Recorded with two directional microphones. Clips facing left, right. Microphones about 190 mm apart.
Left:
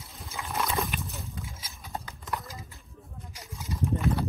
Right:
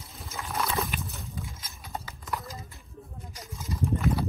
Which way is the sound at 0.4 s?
Centre (ahead or behind).